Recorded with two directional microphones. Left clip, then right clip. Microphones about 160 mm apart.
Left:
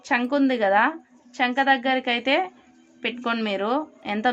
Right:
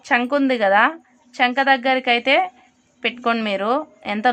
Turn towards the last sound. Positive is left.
turn(degrees=-35)  # may be behind; listen again after turning